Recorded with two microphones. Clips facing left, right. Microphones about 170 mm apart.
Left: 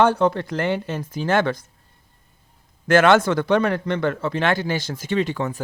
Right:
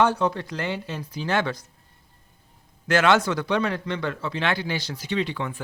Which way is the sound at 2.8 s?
50° left (ahead or behind).